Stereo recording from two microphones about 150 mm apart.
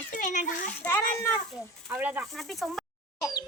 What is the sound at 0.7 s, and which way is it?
Speech, 10° left (ahead or behind).